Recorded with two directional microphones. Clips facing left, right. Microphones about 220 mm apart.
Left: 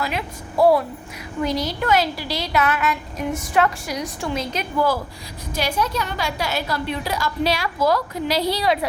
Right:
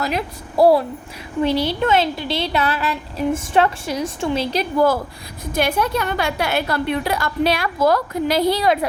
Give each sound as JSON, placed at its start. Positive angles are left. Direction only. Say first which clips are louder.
{"t": 0.0, "sound": "a woman's voice", "louder": "right 3 dB", "side_deg": -40}
{"t": 5.5, "sound": "a woman's voice", "louder": "right 4 dB", "side_deg": -55}